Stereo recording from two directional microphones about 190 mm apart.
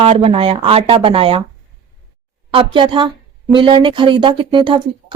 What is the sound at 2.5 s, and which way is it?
Speech, 25° right (ahead or behind).